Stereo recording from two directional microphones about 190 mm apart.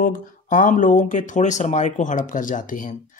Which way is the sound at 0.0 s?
45° left (ahead or behind).